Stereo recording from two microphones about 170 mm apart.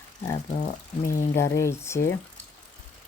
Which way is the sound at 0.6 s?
50° left (ahead or behind).